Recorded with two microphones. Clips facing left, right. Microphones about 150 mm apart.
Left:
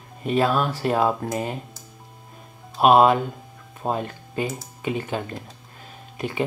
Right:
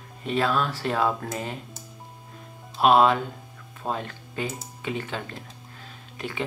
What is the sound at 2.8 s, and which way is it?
Speech, 20° left (ahead or behind).